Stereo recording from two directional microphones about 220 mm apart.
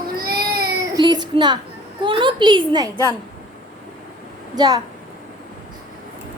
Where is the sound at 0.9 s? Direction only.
20° right (ahead or behind).